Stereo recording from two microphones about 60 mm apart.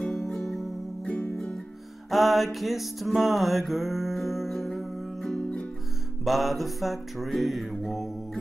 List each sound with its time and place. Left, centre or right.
0.0 s music: centre
6.2 s mantra: centre